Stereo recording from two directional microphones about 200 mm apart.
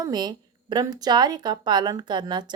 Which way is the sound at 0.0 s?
20° right (ahead or behind).